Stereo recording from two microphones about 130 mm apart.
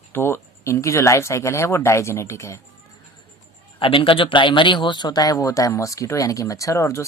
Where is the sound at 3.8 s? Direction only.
45° left (ahead or behind).